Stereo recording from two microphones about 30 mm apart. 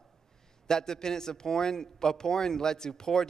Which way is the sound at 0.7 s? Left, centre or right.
Left.